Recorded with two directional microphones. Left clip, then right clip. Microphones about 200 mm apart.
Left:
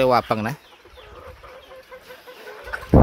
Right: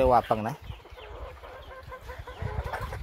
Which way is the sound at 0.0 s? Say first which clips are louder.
Left 4 dB; 30° left (ahead or behind).